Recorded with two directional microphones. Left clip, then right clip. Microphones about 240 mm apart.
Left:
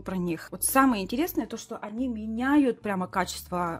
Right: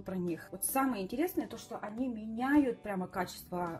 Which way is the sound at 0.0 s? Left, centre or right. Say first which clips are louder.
Left 6 dB; left.